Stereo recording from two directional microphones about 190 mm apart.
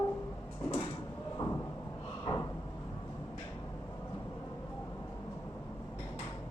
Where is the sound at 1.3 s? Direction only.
15° left (ahead or behind).